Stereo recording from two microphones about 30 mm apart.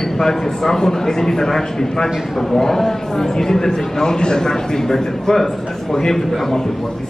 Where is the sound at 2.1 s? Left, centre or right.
Centre.